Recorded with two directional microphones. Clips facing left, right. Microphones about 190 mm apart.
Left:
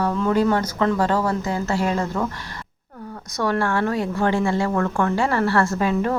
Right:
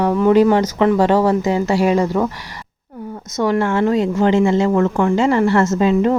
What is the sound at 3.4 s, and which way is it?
A woman's voice, 20° right (ahead or behind).